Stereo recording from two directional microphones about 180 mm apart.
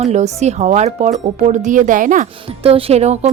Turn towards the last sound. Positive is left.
turn(degrees=-35)  # may be behind; listen again after turning